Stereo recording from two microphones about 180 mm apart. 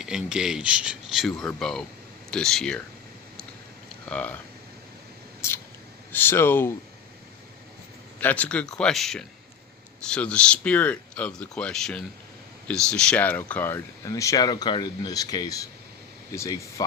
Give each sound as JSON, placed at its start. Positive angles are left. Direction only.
{"t": 0.0, "sound": "speech", "side_deg": -5}
{"t": 4.1, "sound": "speech", "side_deg": 10}
{"t": 5.4, "sound": "mouse", "side_deg": 15}
{"t": 6.1, "sound": "speech", "side_deg": 10}
{"t": 8.2, "sound": "speech", "side_deg": 10}